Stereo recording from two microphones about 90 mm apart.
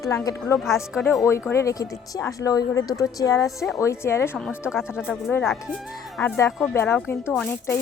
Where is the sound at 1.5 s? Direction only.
40° left (ahead or behind).